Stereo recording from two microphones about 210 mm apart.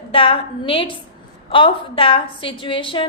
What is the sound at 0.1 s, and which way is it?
A woman's voice, 25° left (ahead or behind).